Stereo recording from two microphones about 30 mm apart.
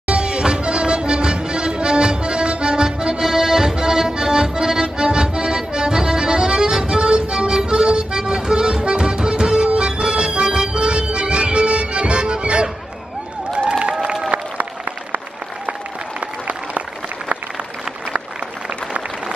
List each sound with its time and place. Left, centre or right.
0.1 s music: right
3.2 s accordion: centre
9.8 s music: right
13.7 s a sound: right
16.2 s applause: right